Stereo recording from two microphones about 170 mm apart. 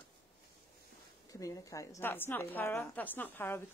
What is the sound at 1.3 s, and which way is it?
A woman's voice, 20° left (ahead or behind).